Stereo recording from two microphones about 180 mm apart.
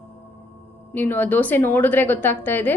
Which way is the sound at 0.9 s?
10° left (ahead or behind).